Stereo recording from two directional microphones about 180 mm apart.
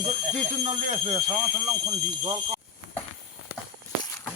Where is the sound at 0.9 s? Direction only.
40° right (ahead or behind).